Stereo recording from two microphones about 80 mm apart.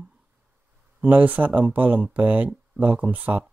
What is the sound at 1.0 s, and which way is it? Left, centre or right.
Speech, centre.